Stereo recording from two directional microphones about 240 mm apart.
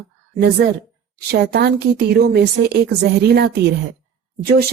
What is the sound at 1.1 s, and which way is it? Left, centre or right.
A woman's voice, right.